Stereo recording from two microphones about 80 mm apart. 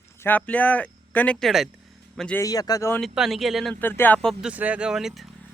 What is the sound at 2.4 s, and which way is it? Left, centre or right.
Speech, left.